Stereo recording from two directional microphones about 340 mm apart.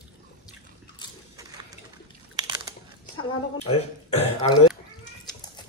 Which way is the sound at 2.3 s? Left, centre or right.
Centre.